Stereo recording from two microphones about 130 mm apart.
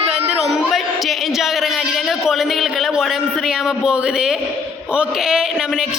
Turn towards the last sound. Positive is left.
turn(degrees=-5)  # may be behind; listen again after turning